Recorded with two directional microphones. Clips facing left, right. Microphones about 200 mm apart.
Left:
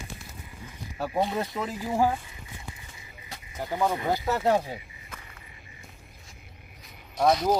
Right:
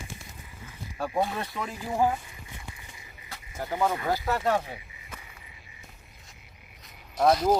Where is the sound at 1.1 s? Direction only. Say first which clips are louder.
Left 2 dB; 20° left (ahead or behind).